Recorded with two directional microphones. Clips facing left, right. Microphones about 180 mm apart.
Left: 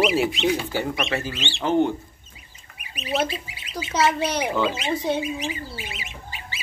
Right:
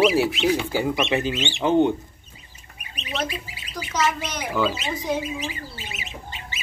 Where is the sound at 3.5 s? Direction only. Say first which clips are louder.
Left 3 dB; 25° left (ahead or behind).